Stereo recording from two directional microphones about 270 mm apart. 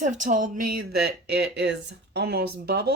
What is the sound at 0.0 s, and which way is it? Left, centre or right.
Speech, right.